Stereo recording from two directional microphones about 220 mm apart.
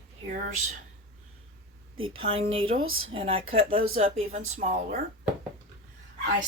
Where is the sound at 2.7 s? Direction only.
65° right (ahead or behind).